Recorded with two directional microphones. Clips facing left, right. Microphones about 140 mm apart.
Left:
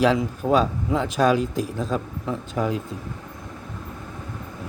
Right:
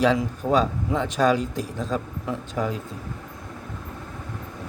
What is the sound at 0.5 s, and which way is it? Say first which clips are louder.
Speech: left 1 dB; 10° left (ahead or behind).